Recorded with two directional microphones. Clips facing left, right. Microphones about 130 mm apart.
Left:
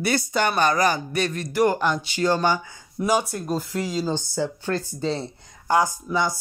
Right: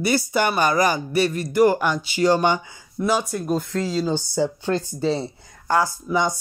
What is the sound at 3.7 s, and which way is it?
Speech, 15° left (ahead or behind).